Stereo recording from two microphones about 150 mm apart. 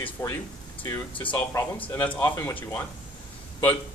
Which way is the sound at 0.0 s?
15° left (ahead or behind).